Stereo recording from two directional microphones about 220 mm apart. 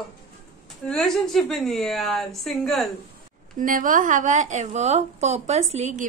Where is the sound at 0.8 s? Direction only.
Centre (ahead or behind).